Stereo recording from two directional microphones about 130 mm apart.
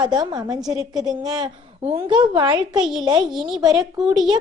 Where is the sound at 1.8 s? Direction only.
45° right (ahead or behind).